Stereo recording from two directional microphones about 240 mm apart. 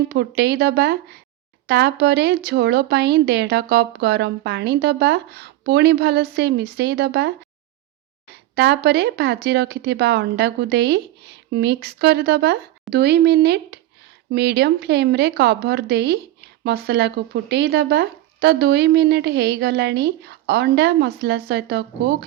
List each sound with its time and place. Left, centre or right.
0.1 s speech: right
8.5 s speech: right